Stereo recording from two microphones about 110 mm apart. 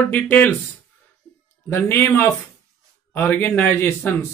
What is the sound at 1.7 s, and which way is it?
Speech, 20° left (ahead or behind).